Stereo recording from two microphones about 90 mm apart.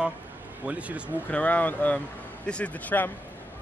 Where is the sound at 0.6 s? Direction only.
15° right (ahead or behind).